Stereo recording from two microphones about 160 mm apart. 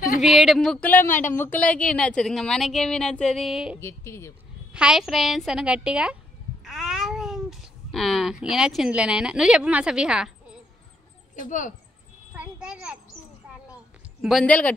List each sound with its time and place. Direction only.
0.2 s speech: centre (ahead or behind)
3.8 s speech: 15° left (ahead or behind)
4.7 s speech: 5° right (ahead or behind)
11.3 s speech: 55° left (ahead or behind)
12.4 s a child's voice: 5° right (ahead or behind)
14.2 s speech: 5° left (ahead or behind)